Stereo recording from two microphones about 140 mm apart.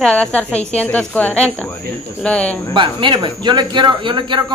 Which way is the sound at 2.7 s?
35° right (ahead or behind).